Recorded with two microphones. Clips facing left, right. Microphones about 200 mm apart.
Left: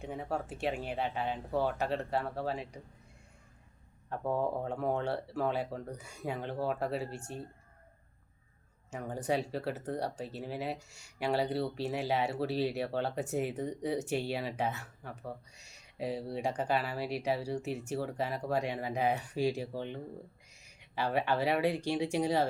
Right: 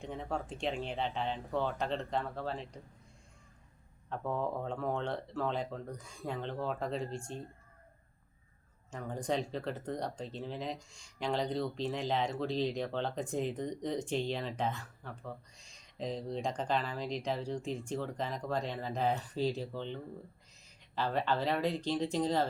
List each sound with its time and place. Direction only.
0.0 s speech: 5° left (ahead or behind)
4.1 s speech: 10° left (ahead or behind)
8.9 s speech: 10° left (ahead or behind)